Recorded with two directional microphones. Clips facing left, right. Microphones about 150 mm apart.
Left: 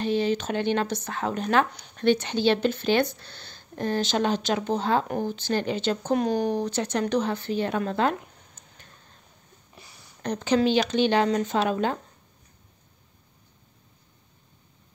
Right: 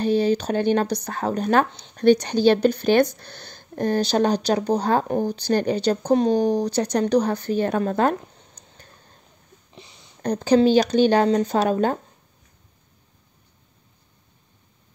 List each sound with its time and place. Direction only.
0.0 s speech: 40° right (ahead or behind)
9.8 s a sound: 20° right (ahead or behind)
10.2 s speech: 35° right (ahead or behind)